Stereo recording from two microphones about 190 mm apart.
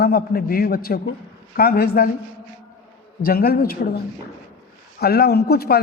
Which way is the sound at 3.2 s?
50° left (ahead or behind).